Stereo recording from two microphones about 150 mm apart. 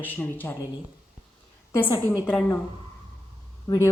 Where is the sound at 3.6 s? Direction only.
25° left (ahead or behind).